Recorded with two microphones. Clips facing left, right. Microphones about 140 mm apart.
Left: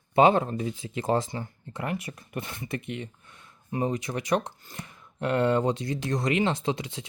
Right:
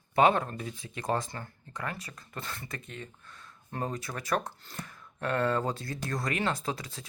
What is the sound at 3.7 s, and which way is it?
Speech, 10° left (ahead or behind).